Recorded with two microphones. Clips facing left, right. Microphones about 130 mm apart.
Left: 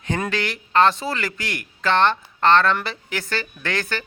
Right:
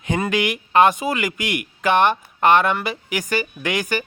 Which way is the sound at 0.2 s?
15° right (ahead or behind).